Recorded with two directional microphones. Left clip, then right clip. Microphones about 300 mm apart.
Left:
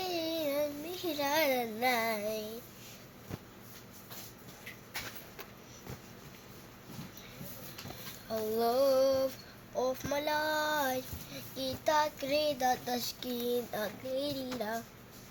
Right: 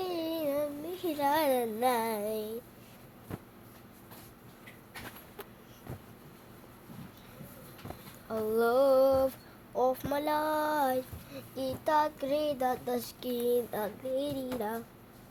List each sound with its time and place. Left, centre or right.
0.0 s child singing: centre
8.3 s child singing: centre